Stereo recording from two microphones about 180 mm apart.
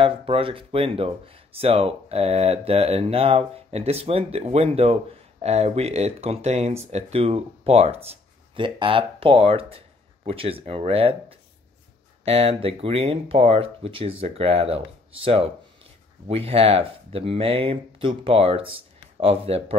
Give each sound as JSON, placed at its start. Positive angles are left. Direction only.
{"t": 0.0, "sound": "speech", "side_deg": -30}